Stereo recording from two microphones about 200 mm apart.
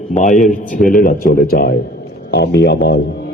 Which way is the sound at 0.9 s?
45° left (ahead or behind).